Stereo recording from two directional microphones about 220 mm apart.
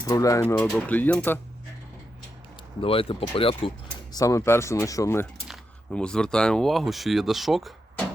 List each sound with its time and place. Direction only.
0.0 s speech: 15° left (ahead or behind)
2.8 s speech: 25° left (ahead or behind)
4.1 s speech: 15° left (ahead or behind)